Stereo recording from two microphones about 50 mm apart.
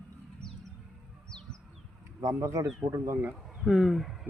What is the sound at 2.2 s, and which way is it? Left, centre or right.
Speech, right.